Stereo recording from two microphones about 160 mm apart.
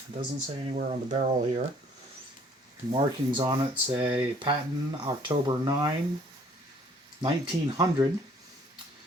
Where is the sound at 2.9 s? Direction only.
30° right (ahead or behind).